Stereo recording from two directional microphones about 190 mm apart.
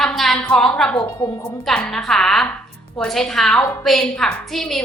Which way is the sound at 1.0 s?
25° left (ahead or behind).